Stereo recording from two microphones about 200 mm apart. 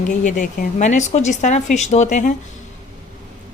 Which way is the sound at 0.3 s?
40° left (ahead or behind).